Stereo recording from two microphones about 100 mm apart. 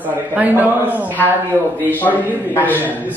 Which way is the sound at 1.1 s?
15° left (ahead or behind).